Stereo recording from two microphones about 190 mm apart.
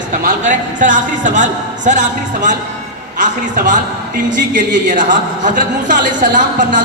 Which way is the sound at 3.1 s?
40° right (ahead or behind).